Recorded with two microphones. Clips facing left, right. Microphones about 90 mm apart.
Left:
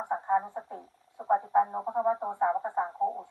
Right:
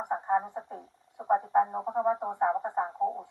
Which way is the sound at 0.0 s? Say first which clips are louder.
Even; 15° right (ahead or behind).